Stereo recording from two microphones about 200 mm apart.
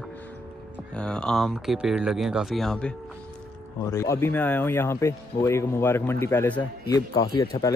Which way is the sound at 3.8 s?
15° left (ahead or behind).